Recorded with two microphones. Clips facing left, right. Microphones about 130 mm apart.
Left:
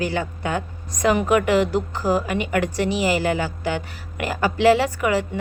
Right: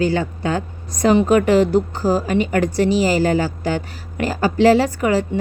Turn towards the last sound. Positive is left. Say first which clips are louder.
# right 4 dB
turn(degrees=-35)  # may be behind; listen again after turning